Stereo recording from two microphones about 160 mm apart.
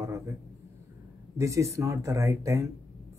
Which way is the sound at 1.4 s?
20° right (ahead or behind).